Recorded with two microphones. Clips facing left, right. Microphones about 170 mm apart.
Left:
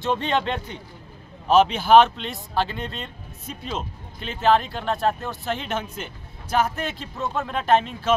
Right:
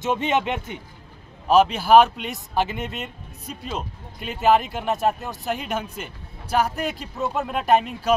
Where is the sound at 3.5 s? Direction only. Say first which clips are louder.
Even; 5° right (ahead or behind).